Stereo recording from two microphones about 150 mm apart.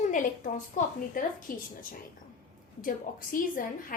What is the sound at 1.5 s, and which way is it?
Speech, 70° left (ahead or behind).